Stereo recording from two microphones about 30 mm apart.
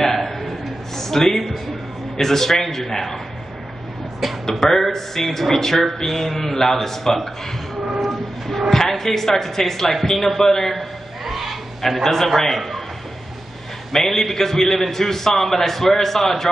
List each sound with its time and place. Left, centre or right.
0.0 s a sound: centre
2.1 s a man's voice: centre
4.5 s a man's voice: centre
8.0 s train: centre
8.6 s a man's voice: centre
11.2 s fowl: centre
12.0 s a man's voice: centre
13.9 s a man's voice: centre